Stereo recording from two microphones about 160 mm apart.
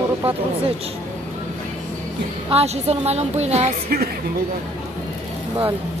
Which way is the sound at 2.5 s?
40° right (ahead or behind).